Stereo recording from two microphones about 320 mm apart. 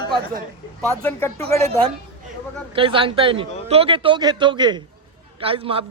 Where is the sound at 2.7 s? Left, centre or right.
Centre.